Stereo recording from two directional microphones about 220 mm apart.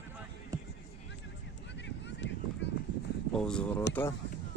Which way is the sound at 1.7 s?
55° left (ahead or behind).